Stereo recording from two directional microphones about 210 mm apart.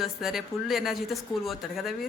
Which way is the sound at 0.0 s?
Centre (ahead or behind).